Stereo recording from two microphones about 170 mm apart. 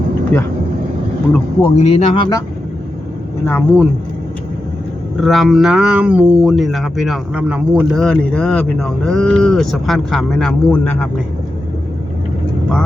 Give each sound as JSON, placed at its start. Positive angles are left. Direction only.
{"t": 0.3, "sound": "speech", "side_deg": 10}
{"t": 1.6, "sound": "a man's voice", "side_deg": 40}
{"t": 3.4, "sound": "speech", "side_deg": 10}
{"t": 5.2, "sound": "speech", "side_deg": 0}
{"t": 8.0, "sound": "speech", "side_deg": 5}